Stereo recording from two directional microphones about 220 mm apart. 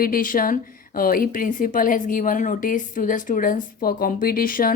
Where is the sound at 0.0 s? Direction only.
40° left (ahead or behind).